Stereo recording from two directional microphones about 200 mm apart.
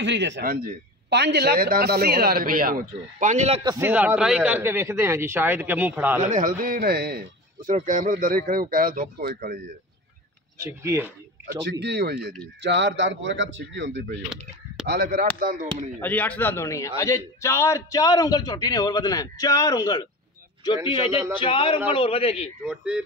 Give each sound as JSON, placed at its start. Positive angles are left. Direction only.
{"t": 0.0, "sound": "speech", "side_deg": -60}
{"t": 3.6, "sound": "a man's voice", "side_deg": -15}
{"t": 6.3, "sound": "speech", "side_deg": -45}
{"t": 7.7, "sound": "speech", "side_deg": -40}
{"t": 10.6, "sound": "a man's voice", "side_deg": -15}
{"t": 11.8, "sound": "speech", "side_deg": -55}
{"t": 14.9, "sound": "speech", "side_deg": -50}
{"t": 16.0, "sound": "a man's voice", "side_deg": 10}
{"t": 22.6, "sound": "speech", "side_deg": -5}